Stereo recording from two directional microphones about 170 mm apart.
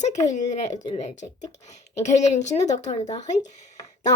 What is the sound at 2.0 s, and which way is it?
A woman's voice, 45° left (ahead or behind).